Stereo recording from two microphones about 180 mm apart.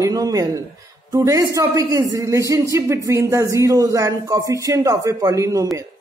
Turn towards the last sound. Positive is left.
turn(degrees=-20)  # may be behind; listen again after turning